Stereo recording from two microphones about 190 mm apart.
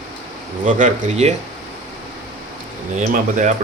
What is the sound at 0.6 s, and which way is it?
Speech, 40° right (ahead or behind).